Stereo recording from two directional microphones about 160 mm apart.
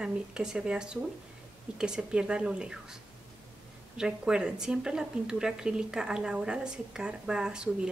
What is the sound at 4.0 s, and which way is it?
A woman's voice, 5° right (ahead or behind).